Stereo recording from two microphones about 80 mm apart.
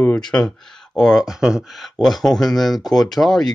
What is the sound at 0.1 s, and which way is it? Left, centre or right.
Speech, centre.